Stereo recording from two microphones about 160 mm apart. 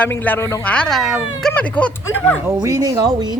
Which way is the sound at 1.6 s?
10° left (ahead or behind).